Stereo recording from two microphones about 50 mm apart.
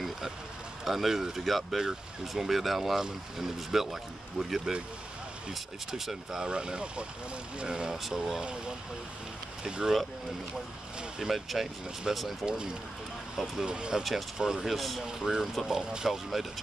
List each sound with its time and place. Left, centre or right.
0.8 s speech: centre
6.4 s speech: centre
11.1 s speech: centre
12.4 s speech: centre
13.7 s speech: centre
15.4 s speech: centre
15.7 s speech: centre